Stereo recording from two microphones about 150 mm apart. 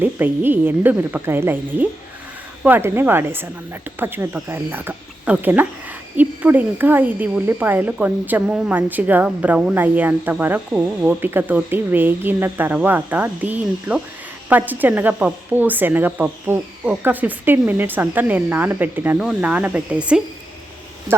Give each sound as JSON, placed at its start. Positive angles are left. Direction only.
{"t": 0.0, "sound": "speech", "side_deg": -10}